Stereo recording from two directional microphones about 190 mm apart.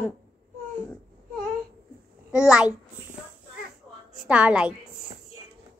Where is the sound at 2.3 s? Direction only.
5° right (ahead or behind).